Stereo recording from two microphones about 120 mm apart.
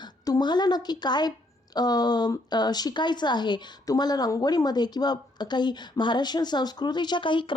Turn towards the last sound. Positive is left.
turn(degrees=45)  # may be behind; listen again after turning